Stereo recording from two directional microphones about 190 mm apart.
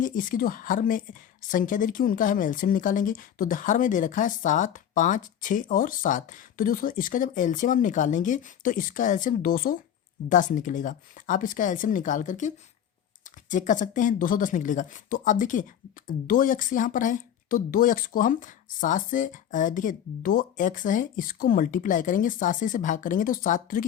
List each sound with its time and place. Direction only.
0.0 s speech: 45° left (ahead or behind)